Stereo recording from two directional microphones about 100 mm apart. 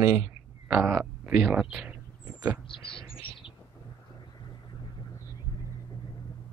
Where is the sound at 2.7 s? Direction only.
60° left (ahead or behind).